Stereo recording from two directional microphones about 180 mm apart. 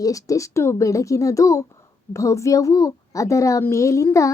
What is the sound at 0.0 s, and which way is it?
A woman's voice, 20° left (ahead or behind).